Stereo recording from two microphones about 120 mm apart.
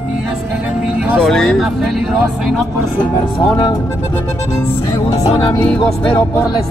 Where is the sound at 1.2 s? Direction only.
5° left (ahead or behind).